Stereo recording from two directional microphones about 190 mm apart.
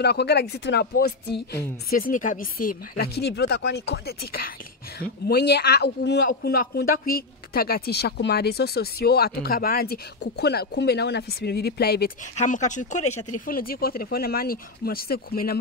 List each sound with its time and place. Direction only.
0.0 s a man's voice: 60° left (ahead or behind)
3.0 s a man's voice: 60° left (ahead or behind)
12.4 s speech: 40° left (ahead or behind)